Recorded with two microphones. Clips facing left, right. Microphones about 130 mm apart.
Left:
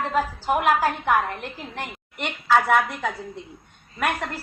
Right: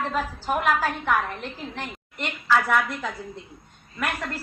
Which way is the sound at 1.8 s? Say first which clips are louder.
Left 1 dB; 15° left (ahead or behind).